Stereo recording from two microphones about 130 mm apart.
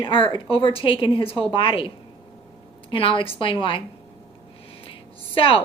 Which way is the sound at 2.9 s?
40° left (ahead or behind).